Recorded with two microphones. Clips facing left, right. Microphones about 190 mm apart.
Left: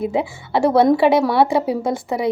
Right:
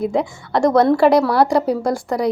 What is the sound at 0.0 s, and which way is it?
Speech, 5° left (ahead or behind).